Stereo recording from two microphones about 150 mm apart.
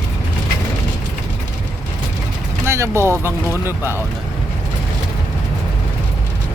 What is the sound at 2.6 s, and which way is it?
Speech, 15° right (ahead or behind).